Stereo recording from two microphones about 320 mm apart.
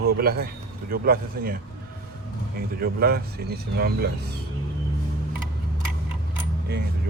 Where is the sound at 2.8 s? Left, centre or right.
Right.